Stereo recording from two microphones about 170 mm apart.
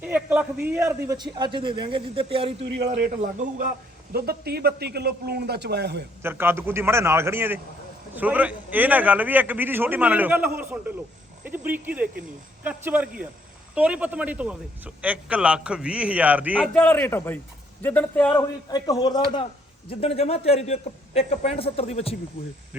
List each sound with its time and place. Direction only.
0.0 s a man's voice: 5° right (ahead or behind); by 2.6 s 35° right (ahead or behind)
2.7 s a man's voice: 50° right (ahead or behind)
4.1 s a man's voice: 65° right (ahead or behind)
6.2 s a man's voice: 15° right (ahead or behind)
16.7 s a man's voice: 10° left (ahead or behind)
18.7 s a man's voice: 25° left (ahead or behind)